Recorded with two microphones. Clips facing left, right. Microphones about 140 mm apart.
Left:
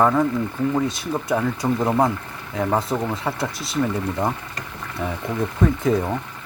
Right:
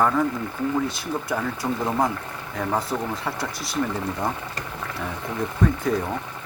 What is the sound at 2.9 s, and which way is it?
Speech, 15° left (ahead or behind).